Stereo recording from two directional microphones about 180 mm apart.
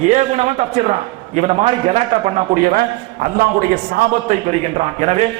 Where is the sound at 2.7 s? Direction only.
50° right (ahead or behind).